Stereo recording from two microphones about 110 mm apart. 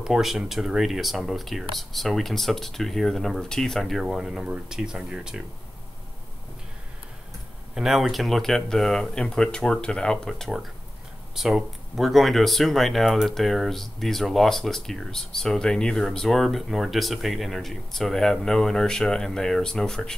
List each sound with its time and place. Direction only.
0.0 s speech: 5° right (ahead or behind)
7.7 s speech: centre (ahead or behind)